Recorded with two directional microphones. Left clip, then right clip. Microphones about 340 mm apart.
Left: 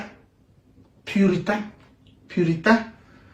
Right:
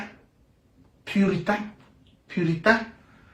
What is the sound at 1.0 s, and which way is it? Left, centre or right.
Speech, centre.